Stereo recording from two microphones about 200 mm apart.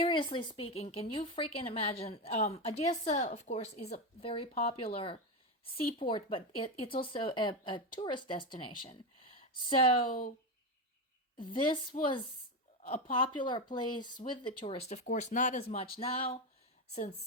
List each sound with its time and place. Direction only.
0.0 s speech: 25° left (ahead or behind)
10.1 s speech: 45° left (ahead or behind)
11.4 s speech: 25° left (ahead or behind)
13.1 s speech: 25° left (ahead or behind)